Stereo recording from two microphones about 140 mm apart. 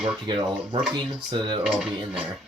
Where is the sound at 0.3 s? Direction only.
35° right (ahead or behind).